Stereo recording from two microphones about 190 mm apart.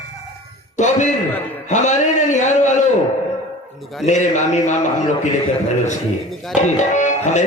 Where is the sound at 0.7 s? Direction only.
40° left (ahead or behind).